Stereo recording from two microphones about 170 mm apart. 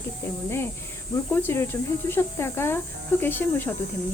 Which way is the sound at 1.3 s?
10° left (ahead or behind).